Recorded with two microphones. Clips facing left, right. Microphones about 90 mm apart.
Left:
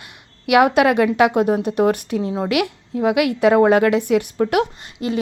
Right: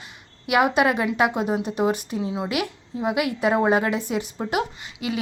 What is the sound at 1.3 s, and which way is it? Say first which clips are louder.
Speech: left 7 dB; 55° left (ahead or behind).